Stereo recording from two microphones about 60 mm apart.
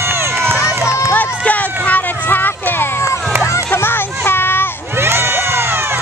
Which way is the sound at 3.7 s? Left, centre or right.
Left.